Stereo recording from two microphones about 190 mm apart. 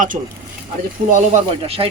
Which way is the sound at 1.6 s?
30° right (ahead or behind).